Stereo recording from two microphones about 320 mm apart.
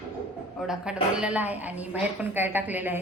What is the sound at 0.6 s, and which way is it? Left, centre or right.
A woman's voice, centre.